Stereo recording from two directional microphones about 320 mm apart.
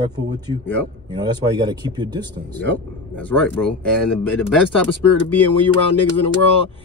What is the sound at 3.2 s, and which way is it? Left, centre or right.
Speech, centre.